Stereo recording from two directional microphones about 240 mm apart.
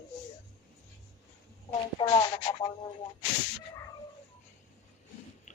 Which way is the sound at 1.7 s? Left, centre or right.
Centre.